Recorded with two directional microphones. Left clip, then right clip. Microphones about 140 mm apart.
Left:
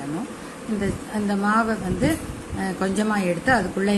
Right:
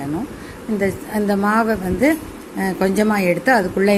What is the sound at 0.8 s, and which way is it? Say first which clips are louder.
A woman's voice: right 8 dB; 50° right (ahead or behind).